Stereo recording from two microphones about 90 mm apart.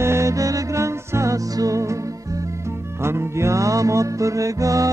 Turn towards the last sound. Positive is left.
turn(degrees=-35)  # may be behind; listen again after turning